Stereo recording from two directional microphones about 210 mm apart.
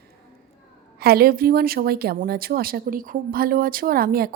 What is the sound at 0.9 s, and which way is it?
A woman's voice, 45° right (ahead or behind).